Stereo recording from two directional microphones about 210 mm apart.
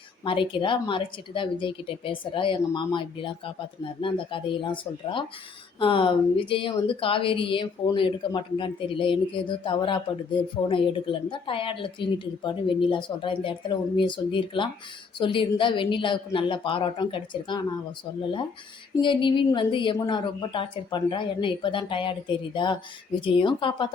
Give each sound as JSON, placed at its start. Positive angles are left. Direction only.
{"t": 0.3, "sound": "a woman's voice", "side_deg": 25}
{"t": 19.0, "sound": "a woman's voice", "side_deg": 25}